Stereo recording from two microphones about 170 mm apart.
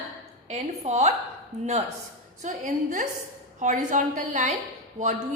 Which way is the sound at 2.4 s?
50° right (ahead or behind).